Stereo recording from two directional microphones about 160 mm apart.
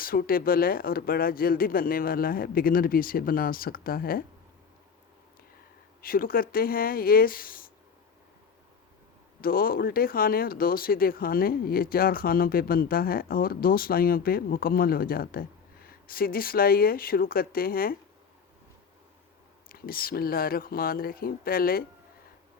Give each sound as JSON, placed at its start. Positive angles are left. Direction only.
{"t": 0.0, "sound": "speech", "side_deg": 65}
{"t": 6.0, "sound": "speech", "side_deg": 65}
{"t": 9.4, "sound": "speech", "side_deg": 65}
{"t": 19.6, "sound": "speech", "side_deg": 65}